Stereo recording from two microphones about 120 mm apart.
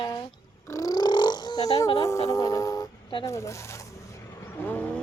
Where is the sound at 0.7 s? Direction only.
30° left (ahead or behind).